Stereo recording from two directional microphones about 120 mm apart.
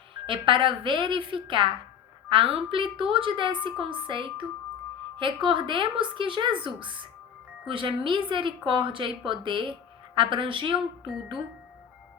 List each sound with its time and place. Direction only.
0.1 s a woman's voice: 45° right (ahead or behind)